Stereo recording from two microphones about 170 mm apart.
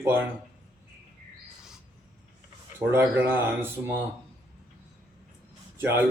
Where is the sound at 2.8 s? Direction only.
10° right (ahead or behind).